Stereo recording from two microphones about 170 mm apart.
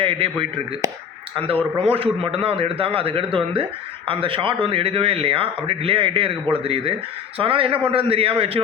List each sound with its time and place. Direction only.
0.0 s speech: 35° right (ahead or behind)
1.7 s speech: 35° right (ahead or behind)